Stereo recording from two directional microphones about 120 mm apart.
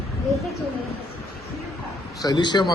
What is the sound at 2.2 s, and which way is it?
Speech, 35° left (ahead or behind).